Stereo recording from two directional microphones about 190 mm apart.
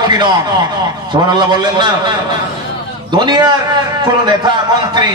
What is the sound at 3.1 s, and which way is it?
A man's voice, 20° right (ahead or behind).